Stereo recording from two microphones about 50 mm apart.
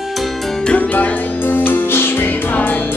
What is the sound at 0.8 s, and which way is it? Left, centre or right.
Music, left.